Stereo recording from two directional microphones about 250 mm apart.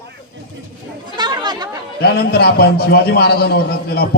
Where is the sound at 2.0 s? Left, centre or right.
Left.